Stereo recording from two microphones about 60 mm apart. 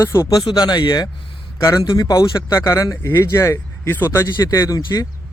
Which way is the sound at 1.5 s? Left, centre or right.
Left.